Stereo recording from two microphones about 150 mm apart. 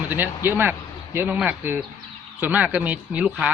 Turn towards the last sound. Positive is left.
turn(degrees=-10)  # may be behind; listen again after turning